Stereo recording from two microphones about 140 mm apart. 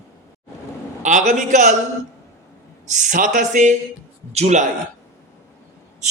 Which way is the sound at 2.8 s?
65° right (ahead or behind).